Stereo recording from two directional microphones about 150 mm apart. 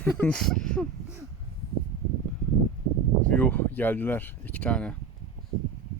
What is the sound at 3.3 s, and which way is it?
Speech, 10° left (ahead or behind).